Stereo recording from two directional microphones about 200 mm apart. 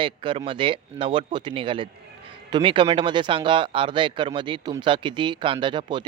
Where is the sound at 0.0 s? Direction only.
25° right (ahead or behind).